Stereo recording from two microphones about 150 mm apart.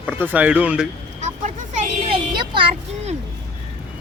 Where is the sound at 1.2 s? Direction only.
50° right (ahead or behind).